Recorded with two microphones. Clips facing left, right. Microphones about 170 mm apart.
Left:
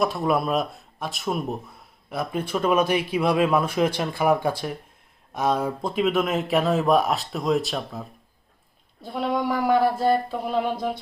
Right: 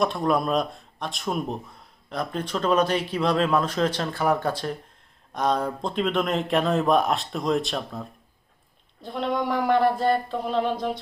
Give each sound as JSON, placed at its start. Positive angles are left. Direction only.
{"t": 0.0, "sound": "a man's voice", "side_deg": 5}
{"t": 9.0, "sound": "a man's voice", "side_deg": 5}